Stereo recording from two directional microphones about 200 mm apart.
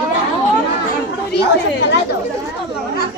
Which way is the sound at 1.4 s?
55° left (ahead or behind).